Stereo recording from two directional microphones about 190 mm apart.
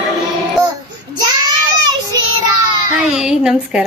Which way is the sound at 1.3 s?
20° right (ahead or behind).